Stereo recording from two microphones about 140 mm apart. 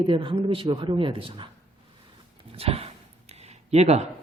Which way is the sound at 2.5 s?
45° right (ahead or behind).